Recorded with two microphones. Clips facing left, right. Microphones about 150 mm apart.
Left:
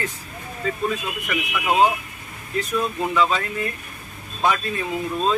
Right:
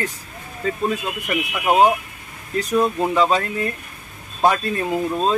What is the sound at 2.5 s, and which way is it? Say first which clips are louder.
Speech: right 5 dB; 40° right (ahead or behind).